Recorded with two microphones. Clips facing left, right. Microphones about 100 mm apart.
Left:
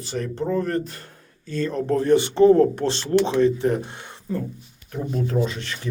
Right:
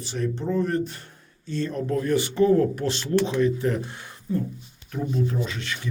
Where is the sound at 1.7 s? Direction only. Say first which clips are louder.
Left 6 dB; 30° left (ahead or behind).